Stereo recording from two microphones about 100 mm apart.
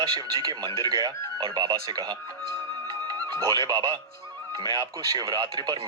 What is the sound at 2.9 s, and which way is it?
Music, 40° right (ahead or behind).